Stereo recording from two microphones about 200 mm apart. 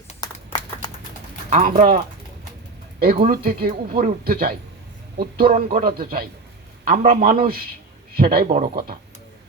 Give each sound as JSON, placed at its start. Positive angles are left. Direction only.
{"t": 0.2, "sound": "clapping", "side_deg": 20}
{"t": 1.5, "sound": "speech", "side_deg": -40}
{"t": 3.2, "sound": "speech", "side_deg": -40}
{"t": 8.4, "sound": "speech", "side_deg": -30}